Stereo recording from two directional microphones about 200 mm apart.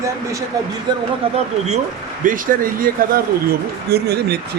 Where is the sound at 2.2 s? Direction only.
40° right (ahead or behind).